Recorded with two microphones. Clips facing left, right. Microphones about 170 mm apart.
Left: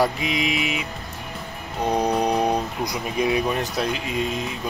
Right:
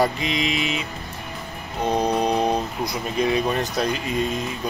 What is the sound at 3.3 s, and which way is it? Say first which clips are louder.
Music: even; 5° left (ahead or behind).